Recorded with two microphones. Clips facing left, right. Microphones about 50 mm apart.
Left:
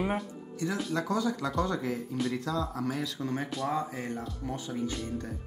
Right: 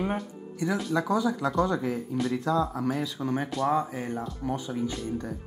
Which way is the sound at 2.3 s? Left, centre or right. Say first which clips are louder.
Right 5 dB; centre.